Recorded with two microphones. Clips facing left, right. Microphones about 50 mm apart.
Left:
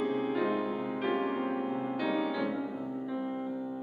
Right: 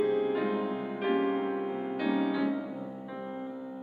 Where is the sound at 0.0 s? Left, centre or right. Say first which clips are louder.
Right 3 dB; centre.